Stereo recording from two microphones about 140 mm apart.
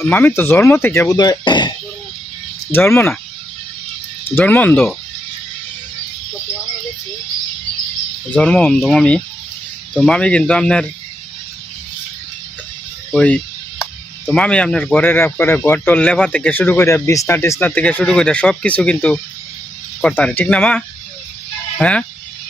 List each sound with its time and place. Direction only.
0.0 s speech: 15° left (ahead or behind); by 1.7 s 30° left (ahead or behind)
2.7 s speech: 15° left (ahead or behind)
4.4 s speech: 15° left (ahead or behind)
8.3 s speech: 5° left (ahead or behind)
13.1 s speech: 10° left (ahead or behind)